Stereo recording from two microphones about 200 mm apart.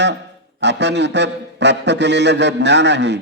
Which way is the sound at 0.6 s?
60° right (ahead or behind).